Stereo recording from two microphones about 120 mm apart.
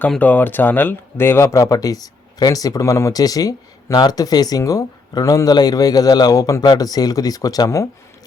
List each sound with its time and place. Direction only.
0.1 s speech: 15° left (ahead or behind); by 7.9 s 30° left (ahead or behind)